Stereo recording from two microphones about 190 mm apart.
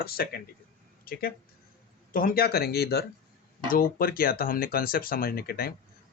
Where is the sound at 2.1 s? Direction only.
45° left (ahead or behind).